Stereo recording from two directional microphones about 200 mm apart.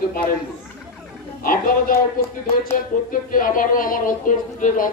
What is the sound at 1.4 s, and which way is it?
Speech, 45° left (ahead or behind).